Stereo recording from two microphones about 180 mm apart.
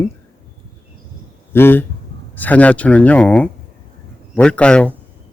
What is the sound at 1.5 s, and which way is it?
Speech, 10° left (ahead or behind).